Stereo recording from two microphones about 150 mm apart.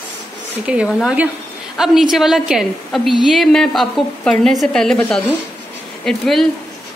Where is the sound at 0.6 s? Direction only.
5° right (ahead or behind).